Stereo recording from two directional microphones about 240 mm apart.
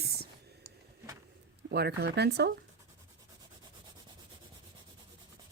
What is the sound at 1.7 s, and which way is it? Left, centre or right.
Speech, right.